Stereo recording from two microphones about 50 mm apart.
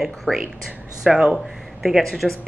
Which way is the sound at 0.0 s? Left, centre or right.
Centre.